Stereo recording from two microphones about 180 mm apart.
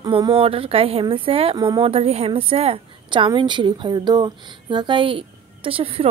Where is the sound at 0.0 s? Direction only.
20° right (ahead or behind).